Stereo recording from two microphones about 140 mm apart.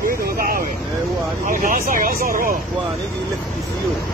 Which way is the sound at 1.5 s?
80° right.